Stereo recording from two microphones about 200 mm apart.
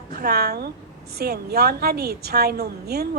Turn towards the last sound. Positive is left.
turn(degrees=-50)  # may be behind; listen again after turning